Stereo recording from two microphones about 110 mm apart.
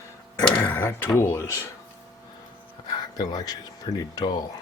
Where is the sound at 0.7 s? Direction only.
25° left (ahead or behind).